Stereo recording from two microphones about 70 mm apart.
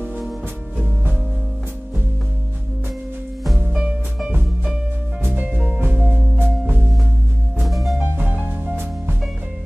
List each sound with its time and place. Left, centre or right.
3.5 s music: centre
5.5 s music: centre
6.0 s music: right
7.6 s music: centre
8.0 s music: right